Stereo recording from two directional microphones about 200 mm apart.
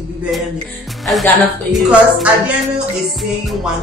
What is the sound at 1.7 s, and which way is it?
Music, 5° right (ahead or behind).